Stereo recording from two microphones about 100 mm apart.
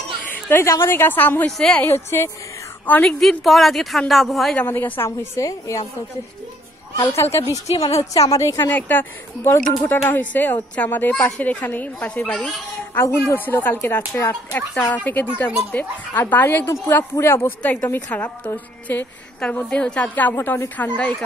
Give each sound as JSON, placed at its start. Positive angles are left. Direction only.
{"t": 0.3, "sound": "a sound", "side_deg": 20}
{"t": 0.7, "sound": "speech", "side_deg": 25}
{"t": 2.9, "sound": "a woman's voice", "side_deg": 10}
{"t": 4.6, "sound": "speech", "side_deg": 20}
{"t": 7.2, "sound": "a woman's voice", "side_deg": 25}
{"t": 8.6, "sound": "a woman's voice", "side_deg": 20}
{"t": 17.6, "sound": "a woman's voice", "side_deg": 15}